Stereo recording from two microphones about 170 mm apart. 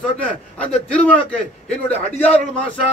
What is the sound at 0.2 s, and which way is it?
A man's voice, 10° left (ahead or behind).